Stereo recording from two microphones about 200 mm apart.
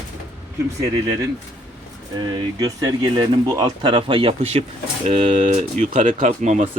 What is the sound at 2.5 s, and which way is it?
Speech, 20° right (ahead or behind).